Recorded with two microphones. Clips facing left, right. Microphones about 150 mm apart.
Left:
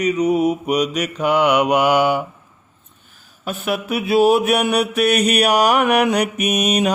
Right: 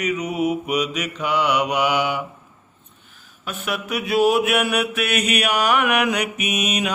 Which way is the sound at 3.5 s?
35° left (ahead or behind).